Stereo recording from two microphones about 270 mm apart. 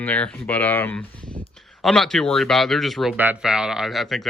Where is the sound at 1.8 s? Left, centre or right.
Centre.